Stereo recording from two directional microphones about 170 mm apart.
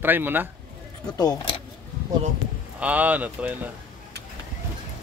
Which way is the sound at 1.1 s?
25° left (ahead or behind).